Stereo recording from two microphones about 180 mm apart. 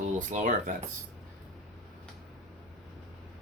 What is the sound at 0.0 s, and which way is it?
Speech, 45° right (ahead or behind).